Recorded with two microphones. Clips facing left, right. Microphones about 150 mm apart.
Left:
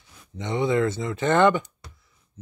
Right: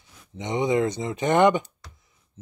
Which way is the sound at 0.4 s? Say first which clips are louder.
Even; 20° right (ahead or behind).